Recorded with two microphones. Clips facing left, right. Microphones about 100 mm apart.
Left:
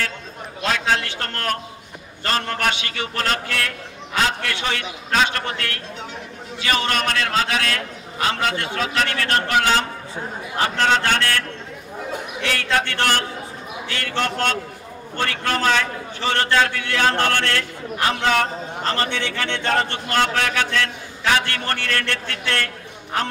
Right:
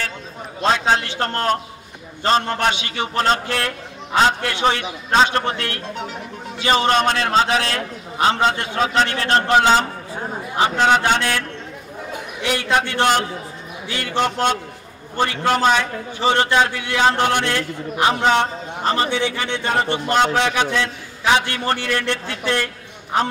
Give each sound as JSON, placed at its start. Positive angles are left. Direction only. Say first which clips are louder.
{"t": 0.6, "sound": "a man's voice", "louder": "right 4 dB", "side_deg": -25}